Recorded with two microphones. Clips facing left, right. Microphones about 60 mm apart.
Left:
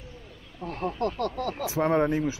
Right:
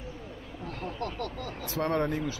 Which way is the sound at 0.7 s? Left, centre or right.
Left.